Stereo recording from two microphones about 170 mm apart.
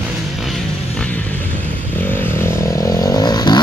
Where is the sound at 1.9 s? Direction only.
10° left (ahead or behind).